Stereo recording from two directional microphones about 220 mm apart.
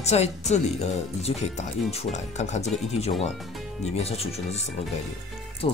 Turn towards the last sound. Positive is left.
turn(degrees=25)  # may be behind; listen again after turning